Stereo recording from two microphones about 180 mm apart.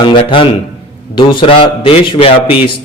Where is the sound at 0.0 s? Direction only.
30° left (ahead or behind).